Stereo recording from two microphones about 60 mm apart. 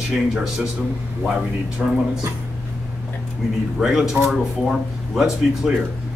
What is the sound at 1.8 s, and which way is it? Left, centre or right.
Speech, centre.